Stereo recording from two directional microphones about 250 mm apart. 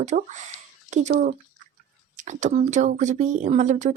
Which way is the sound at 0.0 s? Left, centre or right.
Right.